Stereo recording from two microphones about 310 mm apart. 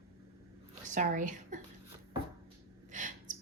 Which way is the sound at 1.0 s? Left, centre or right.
Right.